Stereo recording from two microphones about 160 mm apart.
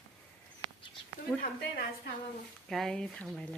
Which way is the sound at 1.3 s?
5° right (ahead or behind).